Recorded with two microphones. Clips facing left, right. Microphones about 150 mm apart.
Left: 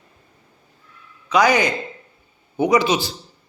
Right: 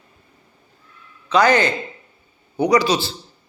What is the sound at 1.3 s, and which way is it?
A man's voice, 10° left (ahead or behind).